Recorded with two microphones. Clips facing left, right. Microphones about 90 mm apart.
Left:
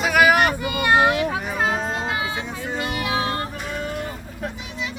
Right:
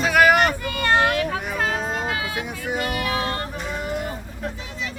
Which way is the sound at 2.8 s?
20° left (ahead or behind).